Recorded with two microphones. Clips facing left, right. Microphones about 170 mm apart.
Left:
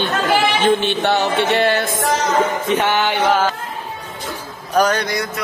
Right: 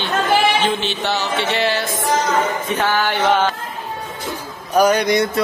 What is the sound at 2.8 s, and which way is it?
Mantra, 20° left (ahead or behind).